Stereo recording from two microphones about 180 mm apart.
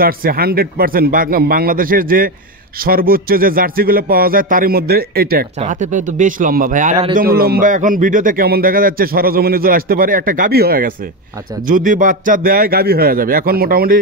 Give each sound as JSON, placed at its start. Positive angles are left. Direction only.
{"t": 0.0, "sound": "a man's voice", "side_deg": -55}
{"t": 5.6, "sound": "a man's voice", "side_deg": -45}
{"t": 7.2, "sound": "a man's voice", "side_deg": -55}
{"t": 11.6, "sound": "a man's voice", "side_deg": -45}